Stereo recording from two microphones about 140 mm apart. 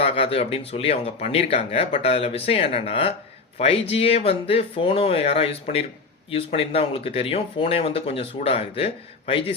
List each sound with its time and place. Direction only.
0.0 s speech: 45° left (ahead or behind)